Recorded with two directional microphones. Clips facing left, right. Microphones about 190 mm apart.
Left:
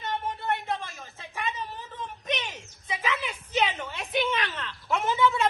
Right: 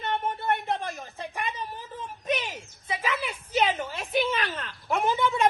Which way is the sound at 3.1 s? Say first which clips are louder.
Even; 10° right (ahead or behind).